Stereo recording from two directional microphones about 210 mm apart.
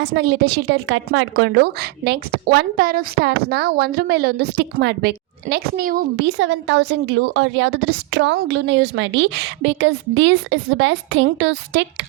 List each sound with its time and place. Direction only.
0.0 s a woman's voice: 55° right (ahead or behind)
6.1 s a woman's voice: 65° right (ahead or behind)